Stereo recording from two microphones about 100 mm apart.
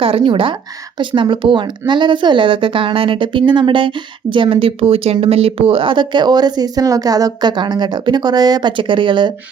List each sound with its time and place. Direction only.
0.0 s a woman's voice: 65° right (ahead or behind)